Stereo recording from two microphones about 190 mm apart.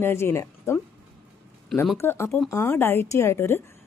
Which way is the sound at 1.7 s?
Centre (ahead or behind).